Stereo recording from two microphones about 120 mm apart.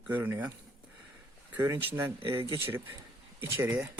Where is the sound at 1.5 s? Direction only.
30° right (ahead or behind).